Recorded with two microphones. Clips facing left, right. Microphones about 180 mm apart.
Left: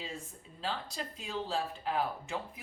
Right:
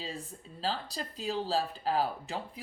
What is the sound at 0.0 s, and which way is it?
Speech, 35° right (ahead or behind).